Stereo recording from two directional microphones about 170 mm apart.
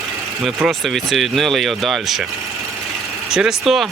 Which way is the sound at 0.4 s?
Centre (ahead or behind).